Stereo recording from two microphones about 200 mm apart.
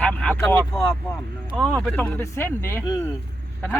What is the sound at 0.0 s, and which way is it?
Vehicle, 5° left (ahead or behind).